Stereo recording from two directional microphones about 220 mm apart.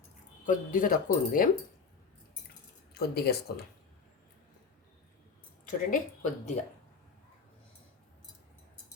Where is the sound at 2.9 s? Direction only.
45° left (ahead or behind).